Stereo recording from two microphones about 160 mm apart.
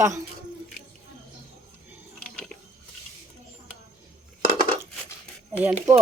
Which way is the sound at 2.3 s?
5° left (ahead or behind).